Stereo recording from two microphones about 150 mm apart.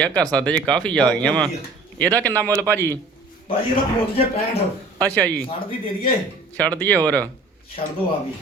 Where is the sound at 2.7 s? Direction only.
15° left (ahead or behind).